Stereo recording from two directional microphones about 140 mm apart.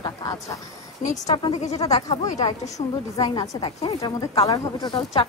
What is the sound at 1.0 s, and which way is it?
A woman's voice, 60° left (ahead or behind).